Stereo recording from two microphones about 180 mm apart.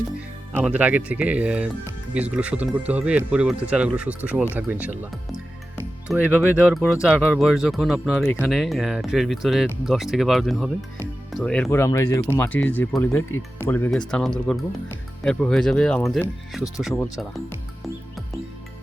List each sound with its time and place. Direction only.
0.5 s speech: 10° right (ahead or behind)
6.1 s speech: 10° right (ahead or behind)
13.7 s speech: 10° left (ahead or behind)